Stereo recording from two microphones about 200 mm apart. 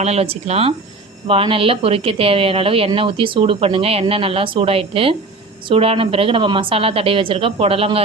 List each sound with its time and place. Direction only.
0.0 s a woman's voice: 30° right (ahead or behind)